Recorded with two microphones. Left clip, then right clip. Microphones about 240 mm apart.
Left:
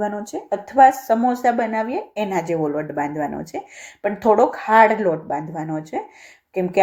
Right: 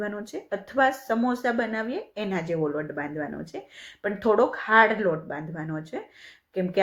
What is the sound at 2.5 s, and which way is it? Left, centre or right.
Speech, left.